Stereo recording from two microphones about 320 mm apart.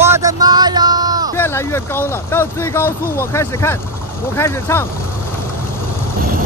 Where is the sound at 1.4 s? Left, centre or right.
Centre.